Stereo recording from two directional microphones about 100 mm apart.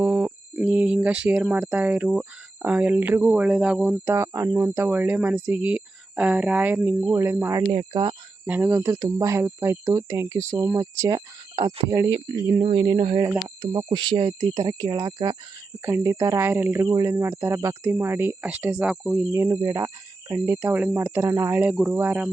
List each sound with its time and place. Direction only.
0.0 s a sound: 20° right (ahead or behind)
0.5 s speech: 10° right (ahead or behind)
4.0 s speech: 25° right (ahead or behind)
7.6 s speech: 55° right (ahead or behind)
8.4 s speech: 20° right (ahead or behind); by 12.1 s 40° right (ahead or behind)
12.8 s speech: 55° right (ahead or behind)
15.8 s speech: 25° right (ahead or behind)
16.9 s speech: 35° right (ahead or behind); by 18.9 s 15° right (ahead or behind)
18.9 s cricket: 5° right (ahead or behind)
19.6 s speech: 35° right (ahead or behind)
21.9 s speech: 15° right (ahead or behind)